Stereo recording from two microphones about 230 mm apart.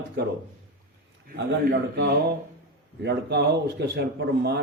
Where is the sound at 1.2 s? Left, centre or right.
Right.